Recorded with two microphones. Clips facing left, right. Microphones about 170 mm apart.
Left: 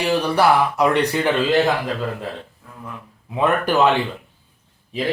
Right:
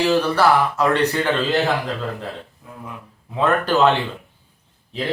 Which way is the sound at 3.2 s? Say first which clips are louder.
Even; 10° left (ahead or behind).